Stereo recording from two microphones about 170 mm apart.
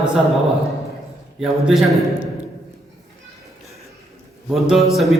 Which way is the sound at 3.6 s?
Centre (ahead or behind).